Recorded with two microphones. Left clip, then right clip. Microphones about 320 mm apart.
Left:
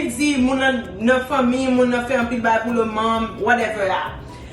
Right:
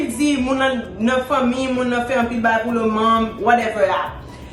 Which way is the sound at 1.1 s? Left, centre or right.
Centre.